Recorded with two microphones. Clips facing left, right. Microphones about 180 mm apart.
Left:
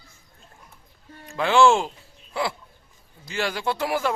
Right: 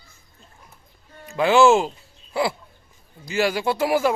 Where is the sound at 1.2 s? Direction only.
5° right (ahead or behind).